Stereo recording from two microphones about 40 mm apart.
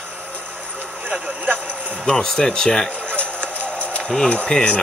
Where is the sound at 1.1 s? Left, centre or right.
Right.